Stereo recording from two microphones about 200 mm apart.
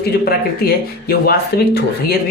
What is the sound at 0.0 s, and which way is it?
Speech, 50° left (ahead or behind).